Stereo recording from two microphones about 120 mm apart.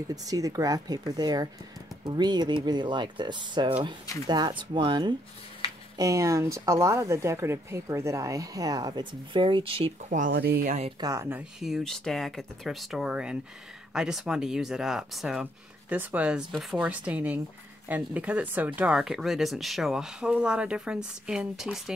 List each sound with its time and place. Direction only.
0.1 s speech: 30° right (ahead or behind)
5.9 s speech: 25° right (ahead or behind); by 9.9 s 50° right (ahead or behind)
10.0 s speech: 90° right
11.0 s speech: 30° right (ahead or behind)
11.6 s speech: centre (ahead or behind)
15.9 s speech: 15° right (ahead or behind)